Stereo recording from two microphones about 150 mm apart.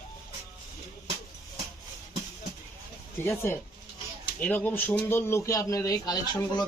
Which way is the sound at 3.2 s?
15° left (ahead or behind).